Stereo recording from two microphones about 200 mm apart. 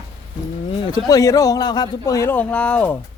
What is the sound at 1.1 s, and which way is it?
Speech, 15° left (ahead or behind).